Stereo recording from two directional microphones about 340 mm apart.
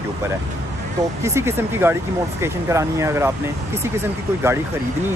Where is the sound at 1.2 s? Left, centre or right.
Centre.